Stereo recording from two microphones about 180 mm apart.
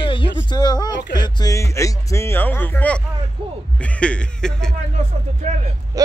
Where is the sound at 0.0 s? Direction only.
30° left (ahead or behind); by 4.7 s 5° left (ahead or behind).